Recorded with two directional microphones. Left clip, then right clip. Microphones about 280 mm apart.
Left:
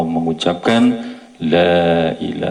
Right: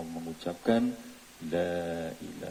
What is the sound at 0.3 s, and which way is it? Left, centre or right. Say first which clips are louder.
Speech: left 12 dB; right.